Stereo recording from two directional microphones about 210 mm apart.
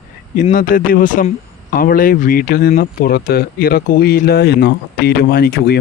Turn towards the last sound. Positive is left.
turn(degrees=50)  # may be behind; listen again after turning